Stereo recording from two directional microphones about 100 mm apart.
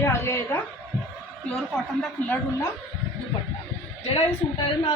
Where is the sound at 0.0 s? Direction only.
25° left (ahead or behind).